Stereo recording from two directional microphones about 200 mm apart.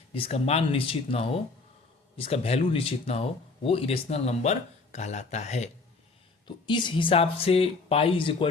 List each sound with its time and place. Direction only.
0.1 s speech: 30° left (ahead or behind)
6.7 s speech: 25° left (ahead or behind)